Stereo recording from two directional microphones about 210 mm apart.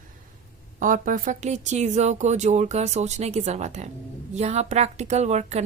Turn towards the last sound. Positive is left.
turn(degrees=-30)  # may be behind; listen again after turning